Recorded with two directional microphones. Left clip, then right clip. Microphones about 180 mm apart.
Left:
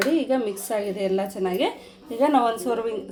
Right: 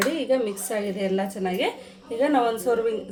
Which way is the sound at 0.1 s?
20° left (ahead or behind).